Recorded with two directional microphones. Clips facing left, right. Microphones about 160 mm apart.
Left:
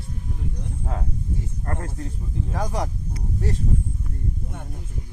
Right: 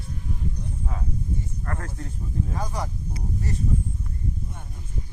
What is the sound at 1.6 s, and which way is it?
Speech, 30° left (ahead or behind).